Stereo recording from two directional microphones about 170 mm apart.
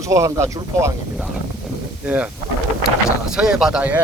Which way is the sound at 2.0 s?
10° right (ahead or behind).